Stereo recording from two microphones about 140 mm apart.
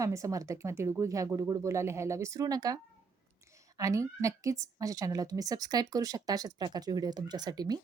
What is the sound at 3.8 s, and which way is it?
Speech, 25° right (ahead or behind).